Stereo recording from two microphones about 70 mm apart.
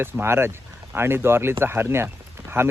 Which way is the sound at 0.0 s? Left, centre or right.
Right.